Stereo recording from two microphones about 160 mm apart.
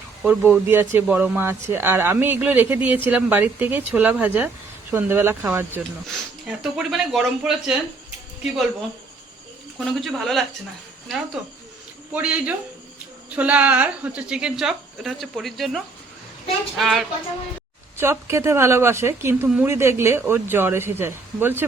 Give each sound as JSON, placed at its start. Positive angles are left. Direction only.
{"t": 0.2, "sound": "speech", "side_deg": -10}
{"t": 6.1, "sound": "a woman's voice", "side_deg": -5}
{"t": 9.7, "sound": "a woman's voice", "side_deg": 0}
{"t": 12.1, "sound": "a woman's voice", "side_deg": -10}
{"t": 17.9, "sound": "speech", "side_deg": -15}